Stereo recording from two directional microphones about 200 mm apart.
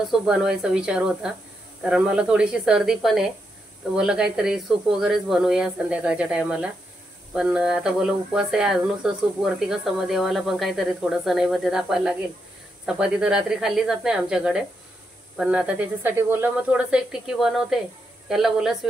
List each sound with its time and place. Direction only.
0.0 s speech: centre (ahead or behind)